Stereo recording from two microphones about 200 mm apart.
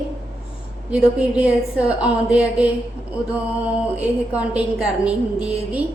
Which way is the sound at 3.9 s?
5° right (ahead or behind).